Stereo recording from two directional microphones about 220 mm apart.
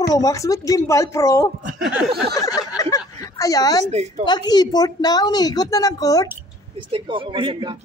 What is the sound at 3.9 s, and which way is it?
Speech, 30° right (ahead or behind).